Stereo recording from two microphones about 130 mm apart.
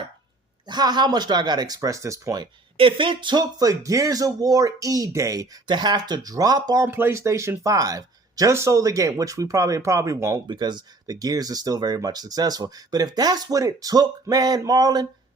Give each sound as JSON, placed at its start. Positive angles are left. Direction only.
{"t": 0.7, "sound": "speech", "side_deg": -35}
{"t": 2.7, "sound": "speech", "side_deg": -40}
{"t": 6.8, "sound": "speech", "side_deg": -15}